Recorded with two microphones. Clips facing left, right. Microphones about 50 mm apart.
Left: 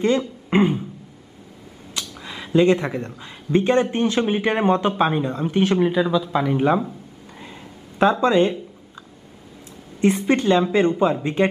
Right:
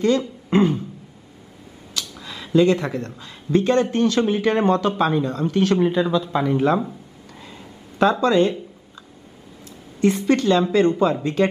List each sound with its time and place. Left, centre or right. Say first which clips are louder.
0.5 s beatboxing: right 1 dB; left
2.0 s a sound: even; left
3.2 s speech: even; left
5.8 s speech: even; centre
6.5 s speech: even; centre
7.3 s a sound: left 1 dB; left
9.9 s speech: even; left